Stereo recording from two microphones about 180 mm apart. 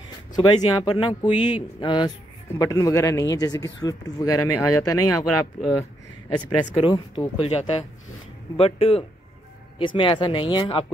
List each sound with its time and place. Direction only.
0.4 s speech: 25° left (ahead or behind)
5.6 s speech: centre (ahead or behind)
6.6 s speech: 30° left (ahead or behind)